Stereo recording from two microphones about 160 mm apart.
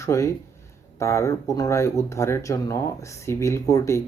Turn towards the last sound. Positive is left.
turn(degrees=20)  # may be behind; listen again after turning